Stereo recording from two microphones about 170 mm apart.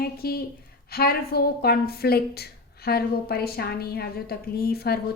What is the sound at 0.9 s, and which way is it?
A woman's voice, 65° left (ahead or behind).